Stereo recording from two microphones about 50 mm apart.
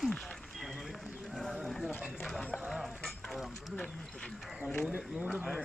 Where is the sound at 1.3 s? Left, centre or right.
Centre.